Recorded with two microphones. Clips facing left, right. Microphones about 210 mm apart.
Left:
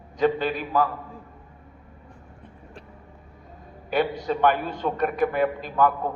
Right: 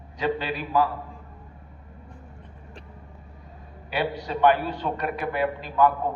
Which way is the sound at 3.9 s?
45° left (ahead or behind).